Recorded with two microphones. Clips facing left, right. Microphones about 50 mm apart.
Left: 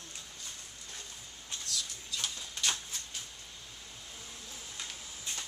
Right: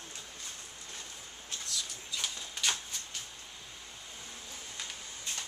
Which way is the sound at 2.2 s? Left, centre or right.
Centre.